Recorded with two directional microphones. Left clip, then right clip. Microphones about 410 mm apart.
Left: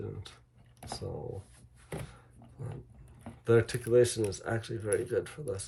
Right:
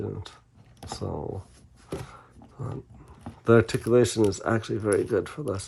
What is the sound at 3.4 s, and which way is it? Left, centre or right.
Speech, centre.